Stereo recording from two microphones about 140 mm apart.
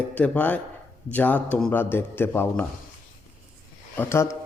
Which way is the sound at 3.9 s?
20° left (ahead or behind).